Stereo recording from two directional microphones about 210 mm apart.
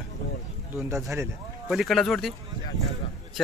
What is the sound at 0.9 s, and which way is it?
Speech, 15° right (ahead or behind).